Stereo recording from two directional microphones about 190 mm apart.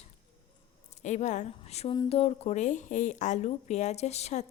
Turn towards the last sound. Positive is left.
turn(degrees=35)  # may be behind; listen again after turning